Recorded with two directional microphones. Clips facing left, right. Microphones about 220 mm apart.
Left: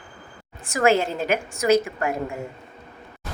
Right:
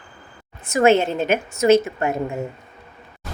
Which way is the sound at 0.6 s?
25° right (ahead or behind).